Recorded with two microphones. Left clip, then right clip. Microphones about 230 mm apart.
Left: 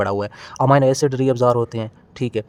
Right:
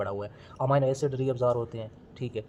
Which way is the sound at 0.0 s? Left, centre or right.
Left.